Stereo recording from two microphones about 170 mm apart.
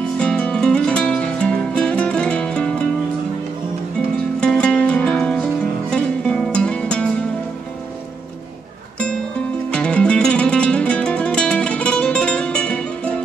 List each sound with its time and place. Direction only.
0.2 s music: 5° left (ahead or behind)
4.4 s music: 5° left (ahead or behind)
9.7 s music: 5° left (ahead or behind)